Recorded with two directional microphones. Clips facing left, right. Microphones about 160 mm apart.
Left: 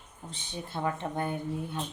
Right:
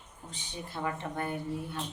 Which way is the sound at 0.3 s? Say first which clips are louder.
Left 2 dB; 30° left (ahead or behind).